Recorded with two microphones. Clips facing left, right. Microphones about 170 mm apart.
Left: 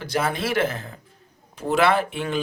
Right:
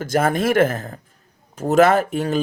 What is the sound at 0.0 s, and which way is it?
Speech, 45° right (ahead or behind).